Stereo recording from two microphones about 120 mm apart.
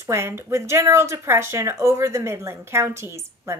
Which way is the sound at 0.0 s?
25° right (ahead or behind).